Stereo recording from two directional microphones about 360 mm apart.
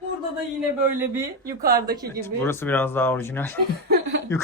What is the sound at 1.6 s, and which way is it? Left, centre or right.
Speech, right.